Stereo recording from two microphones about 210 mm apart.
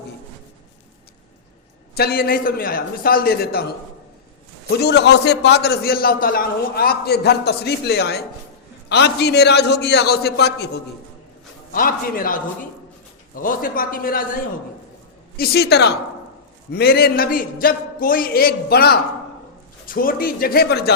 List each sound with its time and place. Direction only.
2.0 s a man's voice: 45° left (ahead or behind)
4.7 s a man's voice: 50° left (ahead or behind)
11.7 s a man's voice: 40° left (ahead or behind)
15.4 s a man's voice: 50° left (ahead or behind)